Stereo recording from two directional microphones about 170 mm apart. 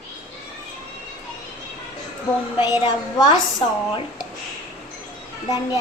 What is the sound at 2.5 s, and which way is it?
Speech, 25° left (ahead or behind).